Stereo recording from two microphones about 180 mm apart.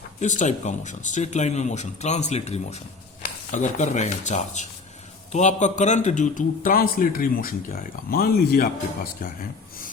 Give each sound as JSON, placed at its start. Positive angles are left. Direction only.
{"t": 0.2, "sound": "a man's voice", "side_deg": 40}